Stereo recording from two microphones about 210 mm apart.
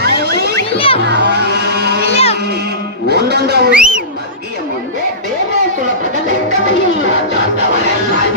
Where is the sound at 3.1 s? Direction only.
50° right (ahead or behind).